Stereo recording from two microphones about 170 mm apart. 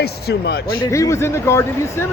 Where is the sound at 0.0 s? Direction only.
70° left (ahead or behind).